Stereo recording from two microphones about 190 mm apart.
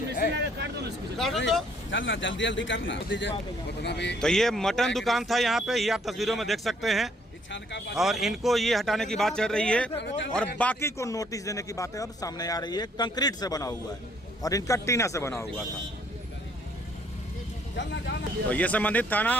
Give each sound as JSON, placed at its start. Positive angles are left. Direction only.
{"t": 0.3, "sound": "a sound", "side_deg": -65}
{"t": 1.2, "sound": "speech", "side_deg": 0}
{"t": 1.9, "sound": "a man's voice", "side_deg": 80}
{"t": 4.2, "sound": "speech", "side_deg": 0}
{"t": 7.5, "sound": "speech", "side_deg": 70}
{"t": 7.9, "sound": "a man's voice", "side_deg": 0}
{"t": 17.7, "sound": "speech", "side_deg": 65}
{"t": 18.4, "sound": "a man's voice", "side_deg": 10}